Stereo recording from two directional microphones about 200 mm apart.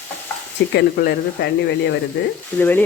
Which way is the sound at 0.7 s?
55° left (ahead or behind).